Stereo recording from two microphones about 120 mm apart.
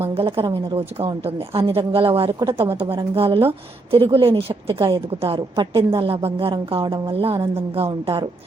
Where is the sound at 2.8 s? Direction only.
50° right (ahead or behind).